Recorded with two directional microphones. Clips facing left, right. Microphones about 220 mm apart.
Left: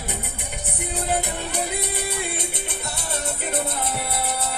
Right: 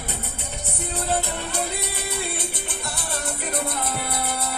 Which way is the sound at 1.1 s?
15° left (ahead or behind).